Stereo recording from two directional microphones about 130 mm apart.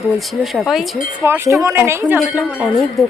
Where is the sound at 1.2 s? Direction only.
20° right (ahead or behind).